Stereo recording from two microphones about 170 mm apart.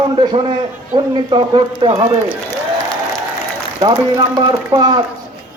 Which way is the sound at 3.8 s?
25° right (ahead or behind).